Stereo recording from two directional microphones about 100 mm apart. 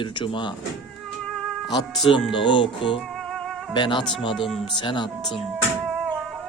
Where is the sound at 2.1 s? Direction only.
60° left (ahead or behind).